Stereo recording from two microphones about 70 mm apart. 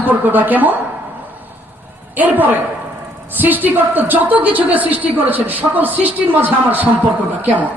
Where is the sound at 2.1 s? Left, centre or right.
Right.